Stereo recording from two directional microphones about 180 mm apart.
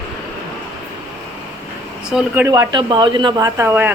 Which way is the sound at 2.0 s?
5° right (ahead or behind).